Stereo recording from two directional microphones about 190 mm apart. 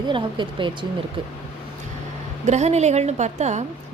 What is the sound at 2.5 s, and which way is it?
A woman's voice, 35° right (ahead or behind).